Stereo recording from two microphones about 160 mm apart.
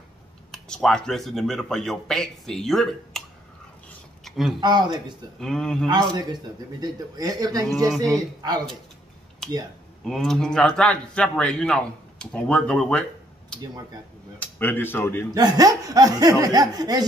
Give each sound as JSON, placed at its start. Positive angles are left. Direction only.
{"t": 0.5, "sound": "a man's voice", "side_deg": 5}
{"t": 4.2, "sound": "a sound", "side_deg": 0}
{"t": 4.6, "sound": "speech", "side_deg": -25}
{"t": 5.4, "sound": "a man's voice", "side_deg": 5}
{"t": 5.9, "sound": "speech", "side_deg": -25}
{"t": 7.7, "sound": "a man's voice", "side_deg": 0}
{"t": 8.0, "sound": "speech", "side_deg": -25}
{"t": 10.0, "sound": "a man's voice", "side_deg": 5}
{"t": 14.4, "sound": "speech", "side_deg": 10}
{"t": 15.3, "sound": "speech", "side_deg": -25}